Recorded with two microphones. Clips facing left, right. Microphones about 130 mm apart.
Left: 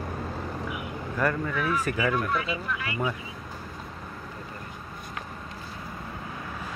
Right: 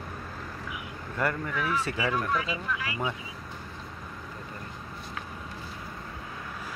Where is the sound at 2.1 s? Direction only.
Centre (ahead or behind).